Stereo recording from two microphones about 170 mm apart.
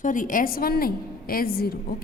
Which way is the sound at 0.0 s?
50° left (ahead or behind).